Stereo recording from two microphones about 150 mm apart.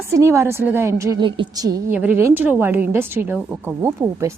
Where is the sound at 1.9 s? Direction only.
10° right (ahead or behind).